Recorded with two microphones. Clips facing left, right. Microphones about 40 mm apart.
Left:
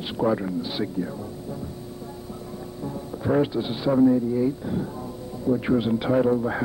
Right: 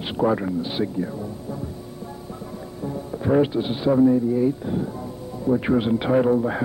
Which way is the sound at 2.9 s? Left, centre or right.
Centre.